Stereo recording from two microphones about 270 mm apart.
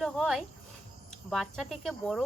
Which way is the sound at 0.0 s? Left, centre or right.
Centre.